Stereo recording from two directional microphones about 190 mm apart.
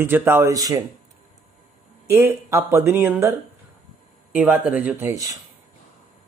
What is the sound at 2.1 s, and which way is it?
Speech, 15° right (ahead or behind).